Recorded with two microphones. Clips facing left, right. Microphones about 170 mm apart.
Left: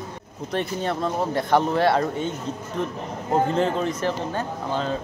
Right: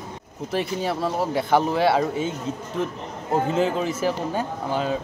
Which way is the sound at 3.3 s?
5° right (ahead or behind).